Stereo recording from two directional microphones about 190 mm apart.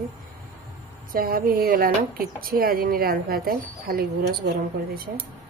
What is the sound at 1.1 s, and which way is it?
Speech, 50° right (ahead or behind).